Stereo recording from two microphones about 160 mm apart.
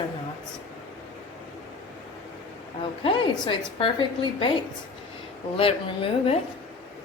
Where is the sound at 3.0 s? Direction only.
35° left (ahead or behind).